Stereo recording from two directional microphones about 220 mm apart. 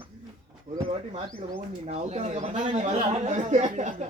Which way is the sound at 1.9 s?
30° right (ahead or behind).